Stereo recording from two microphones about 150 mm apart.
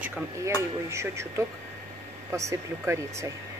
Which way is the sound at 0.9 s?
20° right (ahead or behind).